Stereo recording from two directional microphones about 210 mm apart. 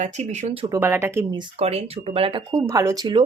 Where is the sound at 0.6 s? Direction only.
15° right (ahead or behind).